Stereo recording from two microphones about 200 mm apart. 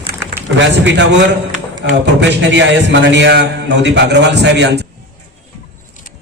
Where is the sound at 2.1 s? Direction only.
60° right (ahead or behind).